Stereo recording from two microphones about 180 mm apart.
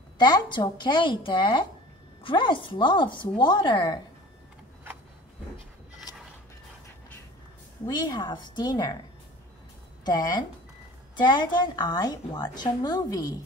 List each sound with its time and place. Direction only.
0.2 s a woman's voice: 25° left (ahead or behind)
7.8 s a woman's voice: 25° left (ahead or behind)
10.0 s a woman's voice: 25° left (ahead or behind)